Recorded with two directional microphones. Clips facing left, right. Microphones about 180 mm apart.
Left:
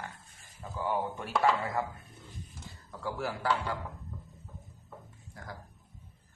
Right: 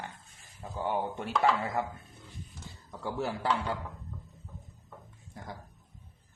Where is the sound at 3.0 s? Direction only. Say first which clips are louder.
Right 2 dB; 25° right (ahead or behind).